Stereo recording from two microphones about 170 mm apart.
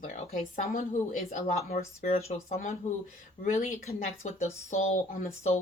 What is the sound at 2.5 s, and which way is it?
A woman's voice, 50° left (ahead or behind).